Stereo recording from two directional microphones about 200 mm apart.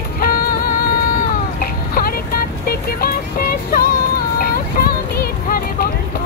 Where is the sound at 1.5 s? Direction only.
45° left (ahead or behind).